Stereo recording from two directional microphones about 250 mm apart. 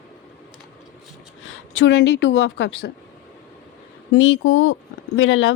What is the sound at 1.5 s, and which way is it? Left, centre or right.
A woman's voice, left.